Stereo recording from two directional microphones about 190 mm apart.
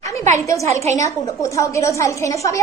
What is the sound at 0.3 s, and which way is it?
A woman's voice, 15° left (ahead or behind).